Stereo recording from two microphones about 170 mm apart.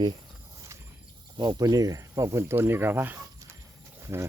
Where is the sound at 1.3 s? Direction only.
25° right (ahead or behind).